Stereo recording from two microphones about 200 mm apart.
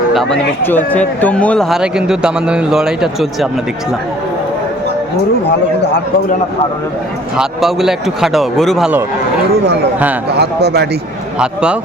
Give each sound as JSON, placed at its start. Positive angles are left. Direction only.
{"t": 0.1, "sound": "speech", "side_deg": 5}
{"t": 5.5, "sound": "speech", "side_deg": 60}
{"t": 7.3, "sound": "speech", "side_deg": 0}
{"t": 10.2, "sound": "a man's voice", "side_deg": -55}
{"t": 11.3, "sound": "speech", "side_deg": -5}